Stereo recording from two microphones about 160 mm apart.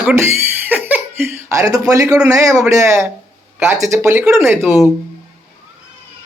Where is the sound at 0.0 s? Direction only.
10° right (ahead or behind).